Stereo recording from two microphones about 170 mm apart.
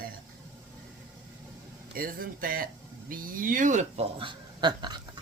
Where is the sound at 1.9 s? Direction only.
55° right (ahead or behind).